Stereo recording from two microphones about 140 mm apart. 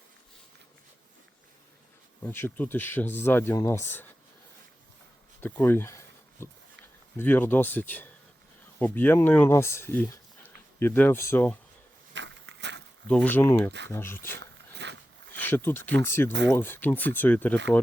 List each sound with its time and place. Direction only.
2.2 s speech: 15° left (ahead or behind)
5.4 s speech: 15° left (ahead or behind)
13.1 s speech: 10° left (ahead or behind)